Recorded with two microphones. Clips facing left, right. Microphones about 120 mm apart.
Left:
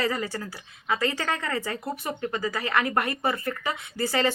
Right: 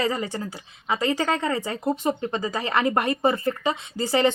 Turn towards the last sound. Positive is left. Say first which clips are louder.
# right 4 dB
turn(degrees=-20)  # may be behind; listen again after turning